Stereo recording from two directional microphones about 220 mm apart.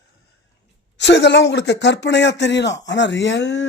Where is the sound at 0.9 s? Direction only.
55° left (ahead or behind).